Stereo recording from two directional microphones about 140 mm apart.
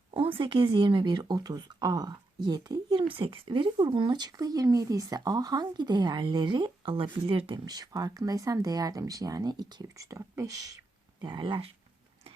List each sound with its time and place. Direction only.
0.1 s speech: 40° right (ahead or behind)
7.6 s speech: 25° right (ahead or behind)